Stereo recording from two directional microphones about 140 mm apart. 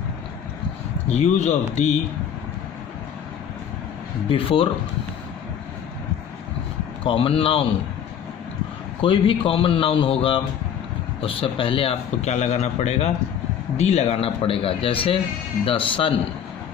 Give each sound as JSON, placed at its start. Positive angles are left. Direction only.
{"t": 1.1, "sound": "a man's voice", "side_deg": 50}
{"t": 4.3, "sound": "a man's voice", "side_deg": 40}
{"t": 7.0, "sound": "a man's voice", "side_deg": 40}
{"t": 9.0, "sound": "a man's voice", "side_deg": 40}